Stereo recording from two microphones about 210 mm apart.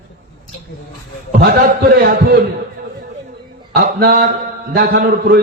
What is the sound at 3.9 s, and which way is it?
A man's voice, 45° right (ahead or behind).